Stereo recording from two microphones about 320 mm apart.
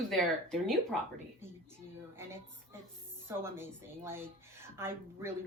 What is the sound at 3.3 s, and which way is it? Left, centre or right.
Speech, centre.